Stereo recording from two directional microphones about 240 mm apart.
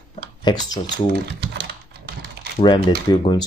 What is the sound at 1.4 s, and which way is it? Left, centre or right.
Typing, right.